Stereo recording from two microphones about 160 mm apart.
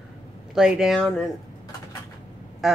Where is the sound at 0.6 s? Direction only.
5° right (ahead or behind).